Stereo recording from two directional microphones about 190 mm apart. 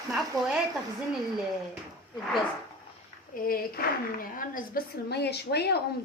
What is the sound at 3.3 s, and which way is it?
A woman's voice, 50° left (ahead or behind).